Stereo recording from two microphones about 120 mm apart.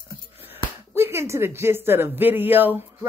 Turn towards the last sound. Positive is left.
turn(degrees=-15)  # may be behind; listen again after turning